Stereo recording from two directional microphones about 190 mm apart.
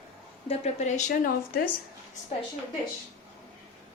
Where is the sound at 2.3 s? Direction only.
35° left (ahead or behind).